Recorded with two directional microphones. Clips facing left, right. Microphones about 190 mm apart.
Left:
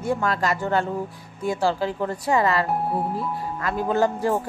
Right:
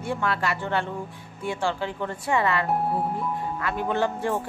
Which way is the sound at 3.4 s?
40° left (ahead or behind).